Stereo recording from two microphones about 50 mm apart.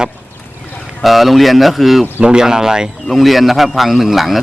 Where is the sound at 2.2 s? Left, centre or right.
Centre.